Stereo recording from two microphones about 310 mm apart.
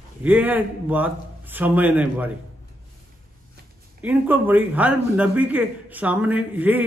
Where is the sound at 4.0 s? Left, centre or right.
Centre.